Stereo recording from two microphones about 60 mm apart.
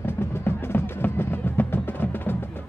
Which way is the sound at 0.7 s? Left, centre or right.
Left.